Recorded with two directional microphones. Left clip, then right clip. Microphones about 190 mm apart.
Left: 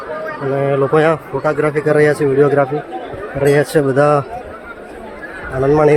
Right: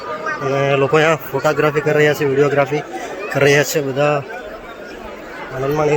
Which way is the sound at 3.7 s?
30° left (ahead or behind).